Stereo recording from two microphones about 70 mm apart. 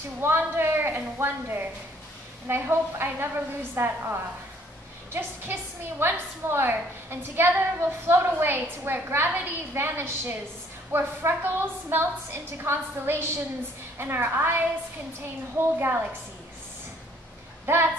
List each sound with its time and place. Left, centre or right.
0.2 s a woman's voice: right
17.6 s a woman's voice: right